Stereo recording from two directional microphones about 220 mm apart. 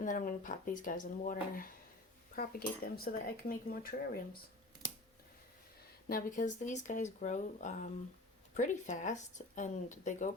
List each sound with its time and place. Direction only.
0.0 s speech: 35° left (ahead or behind)
6.1 s speech: 40° left (ahead or behind)